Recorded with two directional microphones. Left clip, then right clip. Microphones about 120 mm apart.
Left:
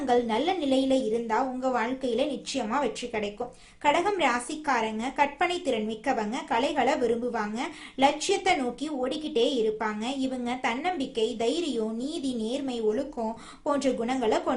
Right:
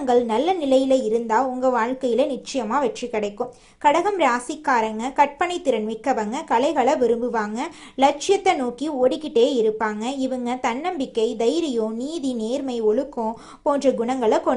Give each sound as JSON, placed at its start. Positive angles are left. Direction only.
{"t": 0.0, "sound": "a woman's voice", "side_deg": -35}